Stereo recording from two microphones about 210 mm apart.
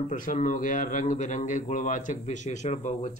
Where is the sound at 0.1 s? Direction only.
40° left (ahead or behind).